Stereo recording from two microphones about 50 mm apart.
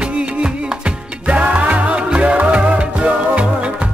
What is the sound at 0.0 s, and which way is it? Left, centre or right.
Music, right.